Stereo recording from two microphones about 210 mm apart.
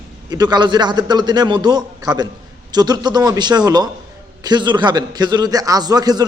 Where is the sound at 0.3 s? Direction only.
20° right (ahead or behind).